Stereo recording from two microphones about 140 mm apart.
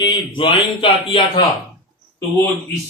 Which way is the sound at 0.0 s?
35° left (ahead or behind).